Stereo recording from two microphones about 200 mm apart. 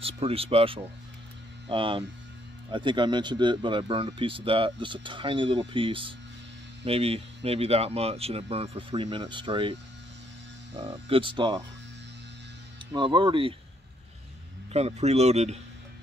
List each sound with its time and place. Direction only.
0.0 s speech: 30° right (ahead or behind)
10.8 s speech: 30° right (ahead or behind)
12.9 s speech: 25° right (ahead or behind)
14.7 s speech: 30° right (ahead or behind)